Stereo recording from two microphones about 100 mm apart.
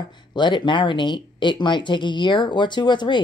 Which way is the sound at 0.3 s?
50° left (ahead or behind).